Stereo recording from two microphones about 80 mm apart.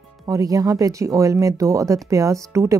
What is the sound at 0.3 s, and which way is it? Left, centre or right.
Speech, right.